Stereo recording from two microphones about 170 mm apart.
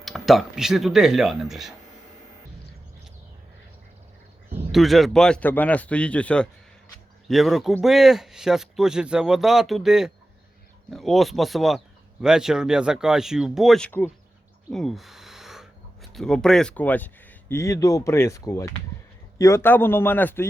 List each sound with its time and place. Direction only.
0.0 s speech: centre (ahead or behind)
4.7 s a man's voice: centre (ahead or behind)